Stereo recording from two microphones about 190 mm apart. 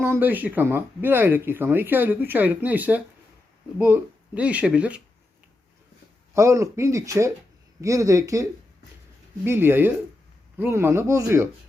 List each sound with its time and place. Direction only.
0.0 s speech: 10° right (ahead or behind)
6.3 s speech: 15° right (ahead or behind)